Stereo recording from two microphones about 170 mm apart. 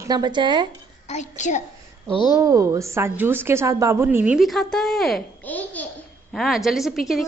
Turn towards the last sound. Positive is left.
turn(degrees=0)  # may be behind; listen again after turning